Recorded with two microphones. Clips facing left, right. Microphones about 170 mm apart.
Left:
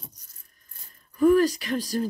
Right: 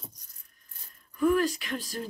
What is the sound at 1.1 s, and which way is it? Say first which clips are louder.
Speech: left 6 dB; 40° left (ahead or behind).